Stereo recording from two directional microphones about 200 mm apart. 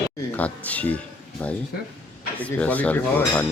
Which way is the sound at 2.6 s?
5° left (ahead or behind).